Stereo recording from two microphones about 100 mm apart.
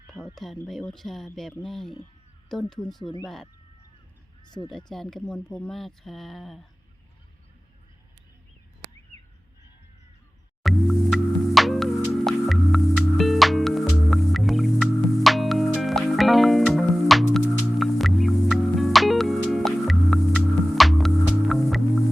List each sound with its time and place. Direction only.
0.1 s speech: 5° left (ahead or behind)
3.0 s speech: 50° left (ahead or behind)
3.2 s speech: 5° left (ahead or behind)
4.4 s speech: 45° left (ahead or behind)
4.9 s speech: 5° left (ahead or behind)
10.6 s music: centre (ahead or behind)